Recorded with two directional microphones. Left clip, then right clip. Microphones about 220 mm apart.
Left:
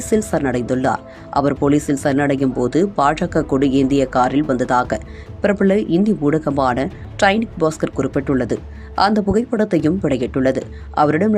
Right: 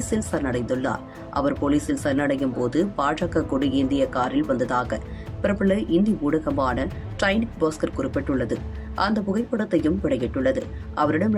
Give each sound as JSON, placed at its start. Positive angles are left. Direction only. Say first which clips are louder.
{"t": 0.1, "sound": "speech", "louder": "left 8 dB", "side_deg": 25}